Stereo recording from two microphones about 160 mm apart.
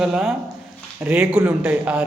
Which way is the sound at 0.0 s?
5° right (ahead or behind).